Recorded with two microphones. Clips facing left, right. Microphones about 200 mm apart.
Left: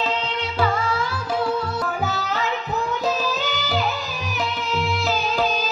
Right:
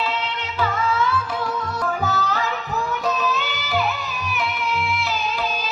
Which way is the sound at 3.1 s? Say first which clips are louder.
Even; 35° left (ahead or behind).